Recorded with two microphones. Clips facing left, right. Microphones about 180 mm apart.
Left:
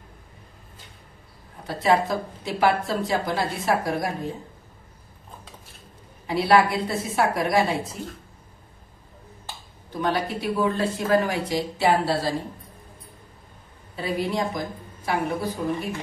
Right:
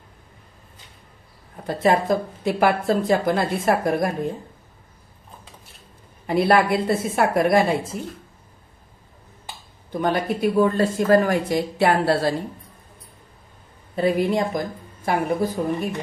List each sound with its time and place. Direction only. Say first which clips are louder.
1.7 s speech: right 3 dB; 50° right (ahead or behind)
6.2 s speech: right 1 dB; 50° right (ahead or behind)
9.9 s speech: right 3 dB; 50° right (ahead or behind)
13.9 s speech: right 6 dB; 50° right (ahead or behind)